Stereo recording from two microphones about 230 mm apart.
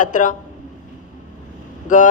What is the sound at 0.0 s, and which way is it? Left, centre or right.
Speech, left.